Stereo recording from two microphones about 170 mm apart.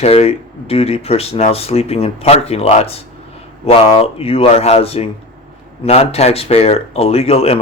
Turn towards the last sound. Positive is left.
turn(degrees=35)  # may be behind; listen again after turning